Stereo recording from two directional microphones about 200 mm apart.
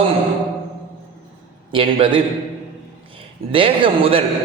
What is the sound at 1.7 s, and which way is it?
Speech, 25° right (ahead or behind).